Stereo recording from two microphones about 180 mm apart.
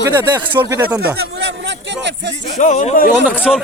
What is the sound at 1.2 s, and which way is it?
A man's voice, 70° right (ahead or behind).